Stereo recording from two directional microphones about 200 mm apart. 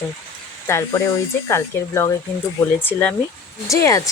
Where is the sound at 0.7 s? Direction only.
15° left (ahead or behind).